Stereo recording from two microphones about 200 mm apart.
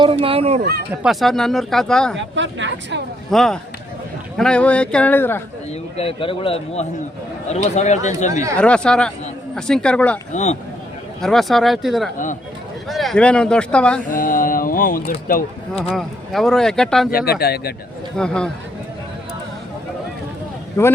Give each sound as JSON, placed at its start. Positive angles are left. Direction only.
{"t": 0.0, "sound": "speech", "side_deg": -25}
{"t": 1.0, "sound": "speech", "side_deg": 0}
{"t": 2.1, "sound": "speech", "side_deg": -65}
{"t": 3.2, "sound": "speech", "side_deg": 0}
{"t": 6.0, "sound": "a man's voice", "side_deg": 25}
{"t": 8.3, "sound": "speech", "side_deg": -15}
{"t": 8.5, "sound": "speech", "side_deg": 5}
{"t": 10.3, "sound": "speech", "side_deg": 35}
{"t": 11.2, "sound": "speech", "side_deg": 0}
{"t": 14.1, "sound": "speech", "side_deg": 45}
{"t": 15.7, "sound": "speech", "side_deg": 0}
{"t": 17.1, "sound": "speech", "side_deg": 50}
{"t": 18.2, "sound": "speech", "side_deg": 5}
{"t": 20.8, "sound": "speech", "side_deg": 15}